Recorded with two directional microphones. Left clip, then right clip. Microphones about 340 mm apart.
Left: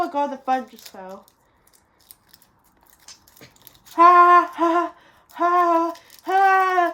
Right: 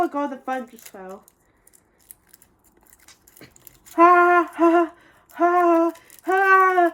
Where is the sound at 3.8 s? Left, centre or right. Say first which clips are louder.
Left 2 dB; centre.